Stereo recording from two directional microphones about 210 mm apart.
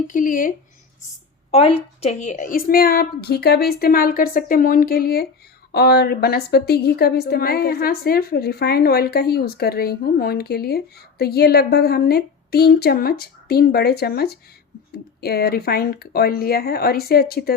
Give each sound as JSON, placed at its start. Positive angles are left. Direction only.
{"t": 0.1, "sound": "speech", "side_deg": 40}
{"t": 1.5, "sound": "a woman's voice", "side_deg": 30}